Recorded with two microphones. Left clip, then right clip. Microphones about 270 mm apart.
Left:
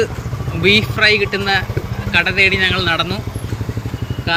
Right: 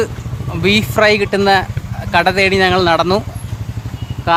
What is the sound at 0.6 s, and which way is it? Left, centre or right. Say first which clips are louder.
Speech: even; centre.